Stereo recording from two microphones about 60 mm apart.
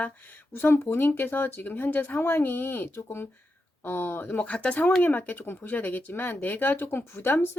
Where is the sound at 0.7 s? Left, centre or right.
Left.